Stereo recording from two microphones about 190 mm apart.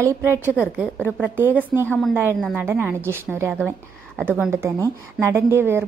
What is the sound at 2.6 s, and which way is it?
A woman's voice, 10° right (ahead or behind).